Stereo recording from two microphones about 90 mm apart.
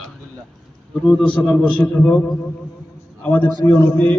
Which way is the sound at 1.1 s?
15° left (ahead or behind).